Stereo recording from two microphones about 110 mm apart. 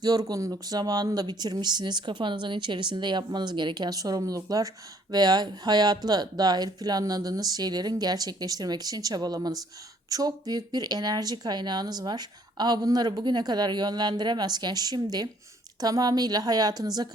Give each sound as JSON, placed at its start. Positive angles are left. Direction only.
{"t": 0.0, "sound": "speech", "side_deg": -35}